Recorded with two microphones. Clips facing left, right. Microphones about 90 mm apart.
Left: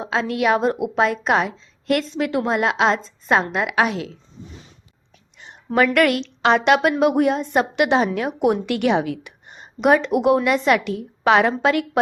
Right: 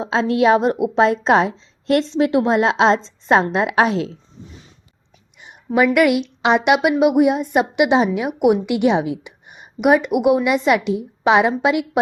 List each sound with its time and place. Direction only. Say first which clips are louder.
0.0 s a woman's voice: right 5 dB; 25° right (ahead or behind)
5.4 s a woman's voice: right 2 dB; 15° right (ahead or behind)